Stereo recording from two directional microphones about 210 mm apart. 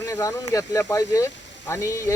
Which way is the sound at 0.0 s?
15° left (ahead or behind).